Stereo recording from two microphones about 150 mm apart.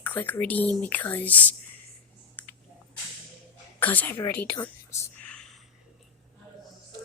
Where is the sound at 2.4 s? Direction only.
10° left (ahead or behind).